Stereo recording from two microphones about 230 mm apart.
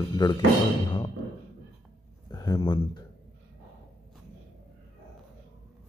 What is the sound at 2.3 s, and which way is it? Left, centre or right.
Speech, centre.